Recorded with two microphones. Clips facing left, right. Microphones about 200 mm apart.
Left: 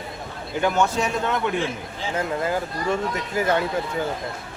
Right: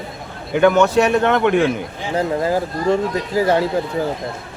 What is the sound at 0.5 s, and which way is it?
A man's voice, 65° right (ahead or behind).